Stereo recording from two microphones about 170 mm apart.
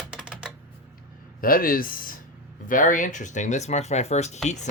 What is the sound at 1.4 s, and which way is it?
Speech, 60° left (ahead or behind).